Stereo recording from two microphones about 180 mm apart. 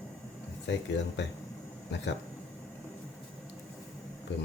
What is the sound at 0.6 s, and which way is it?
Speech, 75° left (ahead or behind).